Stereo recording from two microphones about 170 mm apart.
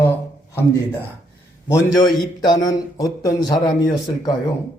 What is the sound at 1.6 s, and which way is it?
A man's voice, 20° left (ahead or behind).